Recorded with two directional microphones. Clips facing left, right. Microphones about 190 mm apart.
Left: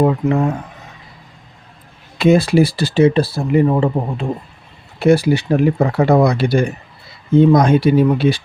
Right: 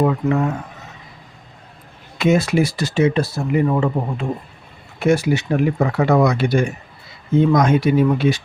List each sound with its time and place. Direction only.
0.0 s speech: 30° left (ahead or behind)
2.1 s speech: 30° left (ahead or behind)